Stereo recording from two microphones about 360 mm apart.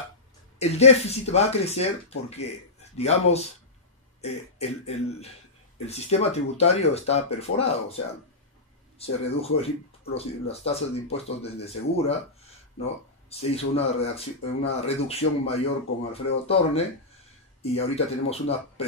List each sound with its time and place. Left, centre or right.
0.6 s speech: centre
8.9 s speech: centre